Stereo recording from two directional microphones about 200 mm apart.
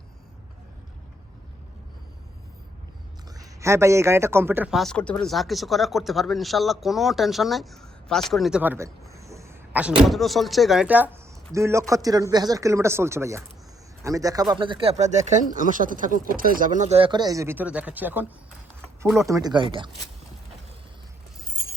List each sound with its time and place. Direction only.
3.3 s a man's voice: 15° right (ahead or behind)
10.0 s speech: centre (ahead or behind)
19.3 s speech: 20° right (ahead or behind)